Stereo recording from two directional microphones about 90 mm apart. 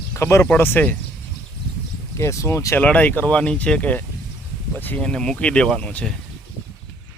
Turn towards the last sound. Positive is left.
turn(degrees=15)  # may be behind; listen again after turning